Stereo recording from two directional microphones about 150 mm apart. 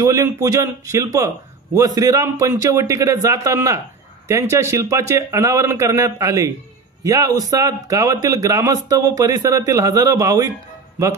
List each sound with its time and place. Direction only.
0.0 s a man's voice: 20° right (ahead or behind)